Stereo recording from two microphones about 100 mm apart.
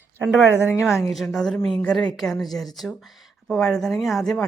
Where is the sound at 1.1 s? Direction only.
Centre (ahead or behind).